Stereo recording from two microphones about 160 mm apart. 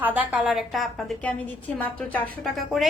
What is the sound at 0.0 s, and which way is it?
A woman's voice, 10° right (ahead or behind).